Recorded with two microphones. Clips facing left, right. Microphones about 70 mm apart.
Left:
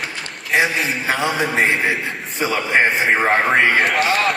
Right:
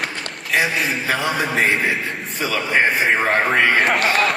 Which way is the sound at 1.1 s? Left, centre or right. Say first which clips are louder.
Left 3 dB; left.